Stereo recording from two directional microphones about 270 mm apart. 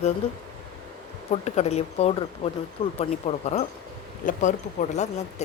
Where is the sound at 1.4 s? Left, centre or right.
Left.